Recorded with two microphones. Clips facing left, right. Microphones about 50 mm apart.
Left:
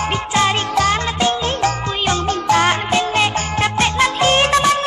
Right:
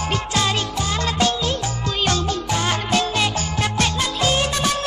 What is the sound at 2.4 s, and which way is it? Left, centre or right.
Music, left.